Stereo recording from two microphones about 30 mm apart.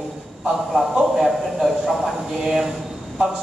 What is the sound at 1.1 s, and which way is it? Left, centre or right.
Speech, centre.